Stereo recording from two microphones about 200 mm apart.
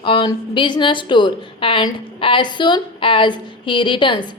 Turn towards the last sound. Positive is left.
turn(degrees=25)  # may be behind; listen again after turning